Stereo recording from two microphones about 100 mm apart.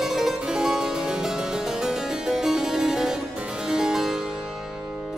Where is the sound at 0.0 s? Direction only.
5° right (ahead or behind).